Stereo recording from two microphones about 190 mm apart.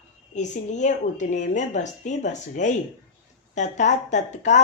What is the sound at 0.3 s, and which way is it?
Speech, 40° left (ahead or behind).